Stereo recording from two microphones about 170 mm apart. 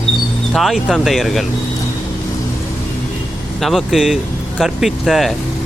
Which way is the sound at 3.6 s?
Centre (ahead or behind).